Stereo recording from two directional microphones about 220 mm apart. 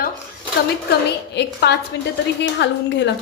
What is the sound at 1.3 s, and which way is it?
Speech, 50° left (ahead or behind).